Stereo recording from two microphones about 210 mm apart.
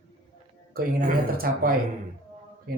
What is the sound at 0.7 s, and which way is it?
A man's voice, 45° right (ahead or behind).